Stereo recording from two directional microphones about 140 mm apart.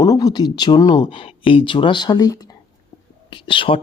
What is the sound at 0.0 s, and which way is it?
Speech, 25° left (ahead or behind).